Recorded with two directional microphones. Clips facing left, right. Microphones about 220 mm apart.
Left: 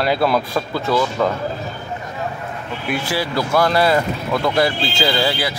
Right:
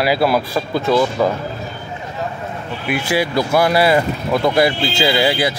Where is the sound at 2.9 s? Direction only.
15° right (ahead or behind).